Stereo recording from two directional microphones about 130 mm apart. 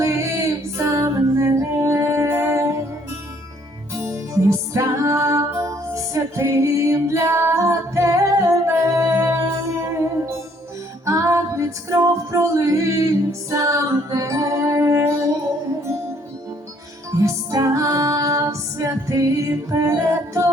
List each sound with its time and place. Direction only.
0.0 s music: 25° right (ahead or behind)
3.9 s music: 20° right (ahead or behind)
11.0 s female singing: 25° right (ahead or behind)
13.5 s music: 25° right (ahead or behind)
17.2 s music: 25° right (ahead or behind)